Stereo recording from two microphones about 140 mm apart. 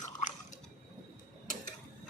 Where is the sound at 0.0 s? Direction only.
60° left (ahead or behind).